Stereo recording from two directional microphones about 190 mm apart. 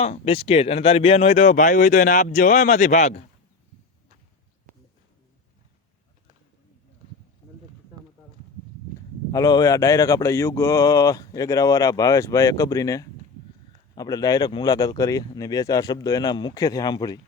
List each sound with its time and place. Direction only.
0.0 s speech: 30° left (ahead or behind)
9.3 s speech: 20° left (ahead or behind)